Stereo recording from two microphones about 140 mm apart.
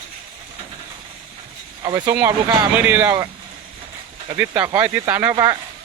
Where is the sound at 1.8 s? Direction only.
30° right (ahead or behind).